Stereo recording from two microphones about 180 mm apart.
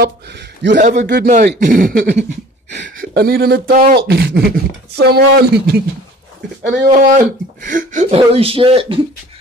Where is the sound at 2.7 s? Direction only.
80° right; by 5.8 s 65° right (ahead or behind).